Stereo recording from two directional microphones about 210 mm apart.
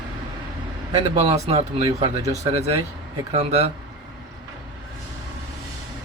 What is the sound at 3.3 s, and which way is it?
Speech, 30° right (ahead or behind).